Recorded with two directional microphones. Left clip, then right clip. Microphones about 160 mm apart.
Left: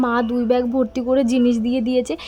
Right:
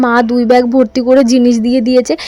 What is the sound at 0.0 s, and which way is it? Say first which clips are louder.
Speech: right 9 dB; 40° right (ahead or behind).